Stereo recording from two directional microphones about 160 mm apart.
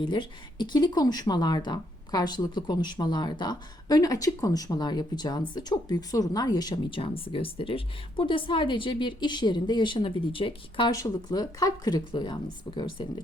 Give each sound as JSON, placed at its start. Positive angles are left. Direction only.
{"t": 0.0, "sound": "speech", "side_deg": 30}